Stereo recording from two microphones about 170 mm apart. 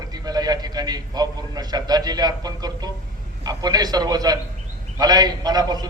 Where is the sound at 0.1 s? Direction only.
25° right (ahead or behind).